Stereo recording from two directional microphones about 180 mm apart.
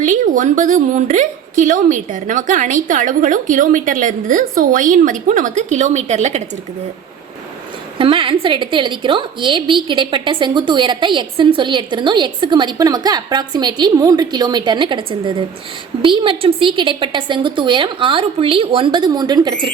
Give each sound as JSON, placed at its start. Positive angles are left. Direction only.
{"t": 0.0, "sound": "a woman's voice", "side_deg": -45}
{"t": 7.9, "sound": "a woman's voice", "side_deg": -30}